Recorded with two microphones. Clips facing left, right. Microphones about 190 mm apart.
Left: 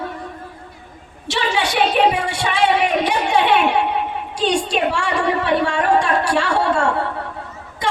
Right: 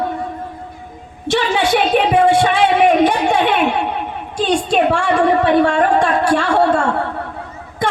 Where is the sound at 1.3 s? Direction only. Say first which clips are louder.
Right 6 dB; 55° right (ahead or behind).